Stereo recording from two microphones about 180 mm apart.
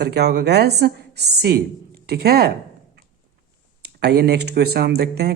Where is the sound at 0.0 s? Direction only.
65° right (ahead or behind).